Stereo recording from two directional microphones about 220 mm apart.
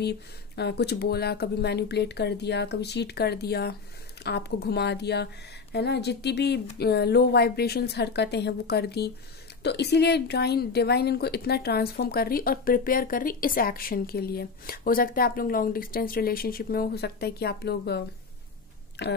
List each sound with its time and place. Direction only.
0.6 s a woman's voice: 50° left (ahead or behind)